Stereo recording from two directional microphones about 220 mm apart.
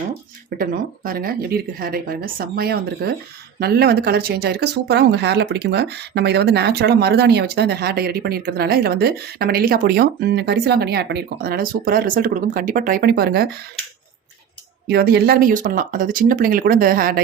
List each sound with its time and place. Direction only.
0.6 s speech: 40° right (ahead or behind)
14.8 s speech: 45° right (ahead or behind)